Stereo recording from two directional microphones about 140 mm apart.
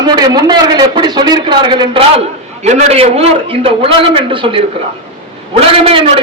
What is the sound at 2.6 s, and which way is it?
A man's voice, 50° right (ahead or behind).